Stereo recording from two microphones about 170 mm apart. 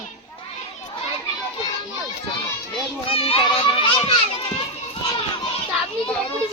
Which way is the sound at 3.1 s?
35° left (ahead or behind).